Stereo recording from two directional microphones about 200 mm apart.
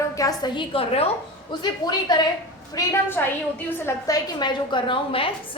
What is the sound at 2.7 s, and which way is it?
A woman's voice, 10° left (ahead or behind).